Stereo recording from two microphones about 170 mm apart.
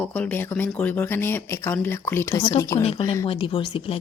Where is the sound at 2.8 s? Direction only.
35° left (ahead or behind).